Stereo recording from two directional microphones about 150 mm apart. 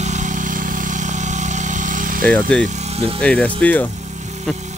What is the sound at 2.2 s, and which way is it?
Speech, 10° left (ahead or behind).